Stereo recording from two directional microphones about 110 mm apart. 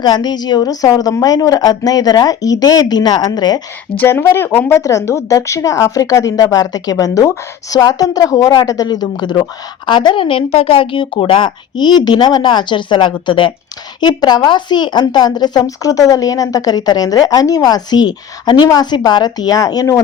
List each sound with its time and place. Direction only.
0.0 s speech: 40° left (ahead or behind)
3.9 s speech: 20° left (ahead or behind)
4.8 s speech: 30° left (ahead or behind)